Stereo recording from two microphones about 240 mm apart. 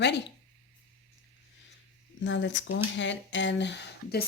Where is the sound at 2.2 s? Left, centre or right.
Left.